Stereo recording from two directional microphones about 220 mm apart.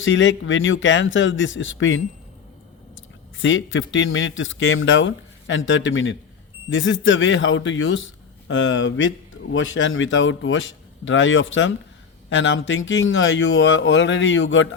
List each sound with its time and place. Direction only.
0.0 s speech: 60° left (ahead or behind)